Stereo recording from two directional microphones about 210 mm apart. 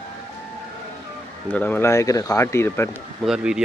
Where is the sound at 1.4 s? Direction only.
10° left (ahead or behind).